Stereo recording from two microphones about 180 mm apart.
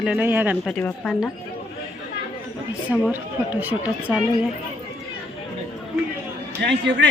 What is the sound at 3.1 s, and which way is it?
A woman's voice, 10° right (ahead or behind).